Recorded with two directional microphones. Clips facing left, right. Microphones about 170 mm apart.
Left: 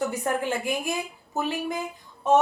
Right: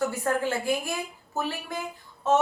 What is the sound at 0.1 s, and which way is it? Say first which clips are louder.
A woman's voice: even; 20° left (ahead or behind).